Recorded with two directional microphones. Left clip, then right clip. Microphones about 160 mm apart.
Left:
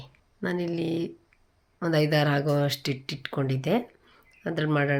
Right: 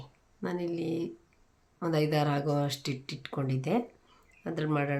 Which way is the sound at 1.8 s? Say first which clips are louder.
Left 5 dB; 25° left (ahead or behind).